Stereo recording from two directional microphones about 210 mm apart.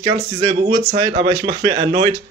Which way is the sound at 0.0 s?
25° right (ahead or behind).